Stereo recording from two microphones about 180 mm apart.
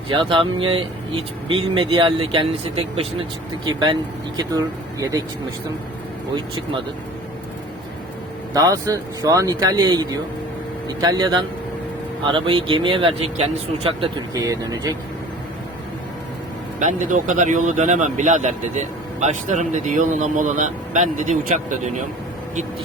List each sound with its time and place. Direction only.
0.1 s speech: 30° right (ahead or behind)
8.5 s speech: 20° right (ahead or behind)
14.3 s speech: 20° right (ahead or behind)
16.8 s speech: 45° right (ahead or behind)